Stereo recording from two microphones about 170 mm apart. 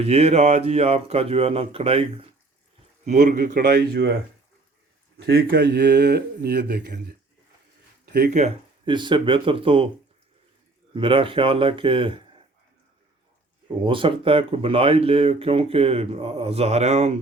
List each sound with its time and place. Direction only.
0.0 s speech: 40° right (ahead or behind)
3.1 s speech: 50° right (ahead or behind); by 4.1 s 75° right (ahead or behind)
5.1 s speech: 65° right (ahead or behind)
8.0 s a sound: 75° right (ahead or behind)
8.3 s speech: 45° right (ahead or behind)
8.8 s speech: 25° right (ahead or behind)
10.9 s speech: 30° right (ahead or behind)
13.8 s speech: 30° right (ahead or behind)